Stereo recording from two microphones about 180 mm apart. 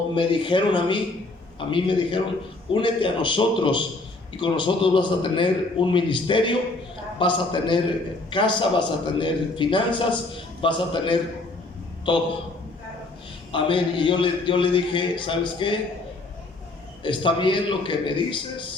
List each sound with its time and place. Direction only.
0.2 s a man's voice: 25° left (ahead or behind)
13.5 s a man's voice: 25° left (ahead or behind)
17.0 s a man's voice: 25° left (ahead or behind)